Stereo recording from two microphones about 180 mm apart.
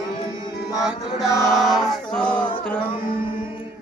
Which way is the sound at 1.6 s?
Centre (ahead or behind).